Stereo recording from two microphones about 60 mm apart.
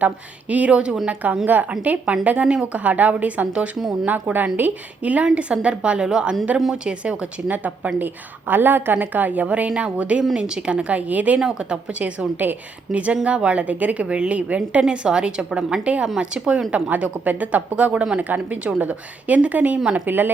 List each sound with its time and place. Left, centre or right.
0.0 s a woman's voice: right
16.9 s a woman's voice: right